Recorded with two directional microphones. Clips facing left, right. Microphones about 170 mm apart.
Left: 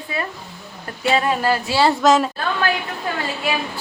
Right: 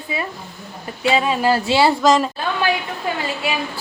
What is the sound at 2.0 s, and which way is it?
Speech, centre (ahead or behind).